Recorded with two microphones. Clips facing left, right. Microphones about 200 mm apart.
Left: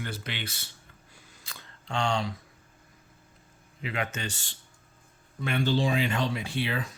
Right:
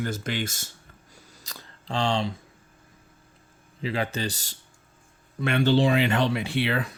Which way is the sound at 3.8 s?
30° right (ahead or behind).